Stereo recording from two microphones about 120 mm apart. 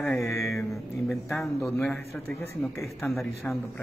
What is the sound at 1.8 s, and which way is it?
Speech, 15° left (ahead or behind).